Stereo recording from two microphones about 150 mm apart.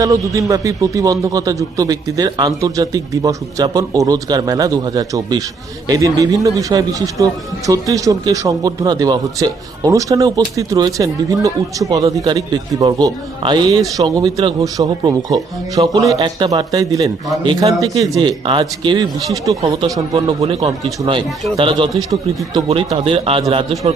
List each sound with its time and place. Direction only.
0.0 s a man's voice: 25° right (ahead or behind)
20.2 s speech: 40° right (ahead or behind)